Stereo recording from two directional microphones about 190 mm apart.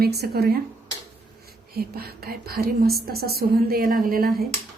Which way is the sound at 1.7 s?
55° right (ahead or behind).